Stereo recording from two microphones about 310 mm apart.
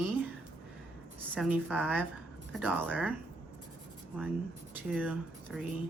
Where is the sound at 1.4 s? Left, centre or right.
Centre.